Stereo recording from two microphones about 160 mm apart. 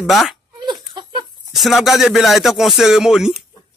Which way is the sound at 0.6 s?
30° right (ahead or behind).